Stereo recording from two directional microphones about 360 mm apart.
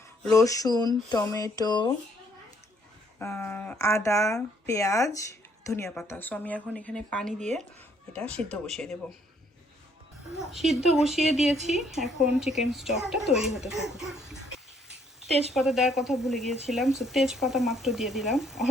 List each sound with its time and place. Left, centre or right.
0.3 s speech: centre
3.2 s speech: centre
7.3 s speech: centre
8.1 s speech: centre
10.5 s speech: centre
15.5 s speech: centre